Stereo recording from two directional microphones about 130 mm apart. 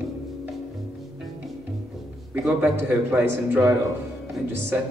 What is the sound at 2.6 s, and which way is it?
Speech, 20° right (ahead or behind).